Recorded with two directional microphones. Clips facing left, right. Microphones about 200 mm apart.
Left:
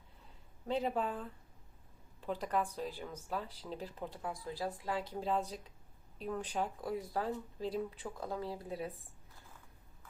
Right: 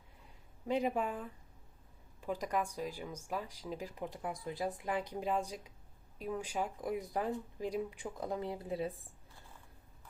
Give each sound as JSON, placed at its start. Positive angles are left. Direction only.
{"t": 0.7, "sound": "speech", "side_deg": -15}